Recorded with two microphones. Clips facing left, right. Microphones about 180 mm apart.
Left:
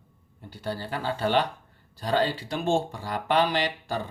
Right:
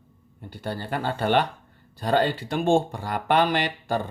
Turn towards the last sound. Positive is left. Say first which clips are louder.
# right 3 dB
turn(degrees=-55)  # may be behind; listen again after turning